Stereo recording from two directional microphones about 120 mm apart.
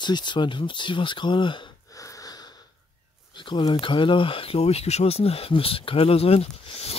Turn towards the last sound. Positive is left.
turn(degrees=55)  # may be behind; listen again after turning